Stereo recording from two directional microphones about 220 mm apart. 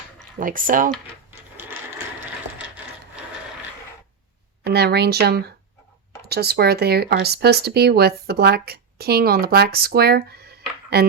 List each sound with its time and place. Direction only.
0.3 s speech: 40° right (ahead or behind)
1.3 s sewing machine: 10° right (ahead or behind)
4.6 s speech: 45° right (ahead or behind)